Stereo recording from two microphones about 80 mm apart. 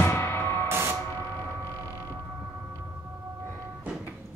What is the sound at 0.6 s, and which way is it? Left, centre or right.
Music, right.